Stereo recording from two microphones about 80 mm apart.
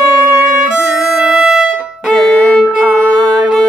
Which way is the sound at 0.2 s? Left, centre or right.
Right.